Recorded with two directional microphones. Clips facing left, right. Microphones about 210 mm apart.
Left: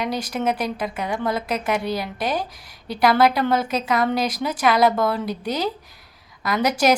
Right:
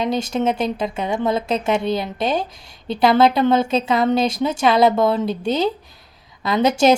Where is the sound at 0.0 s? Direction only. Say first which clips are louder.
Right 4 dB; 25° right (ahead or behind).